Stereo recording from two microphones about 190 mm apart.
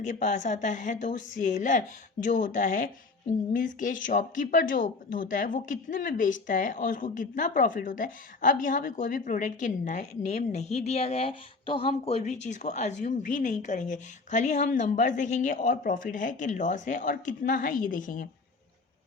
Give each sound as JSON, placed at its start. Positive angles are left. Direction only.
{"t": 0.0, "sound": "a woman's voice", "side_deg": 40}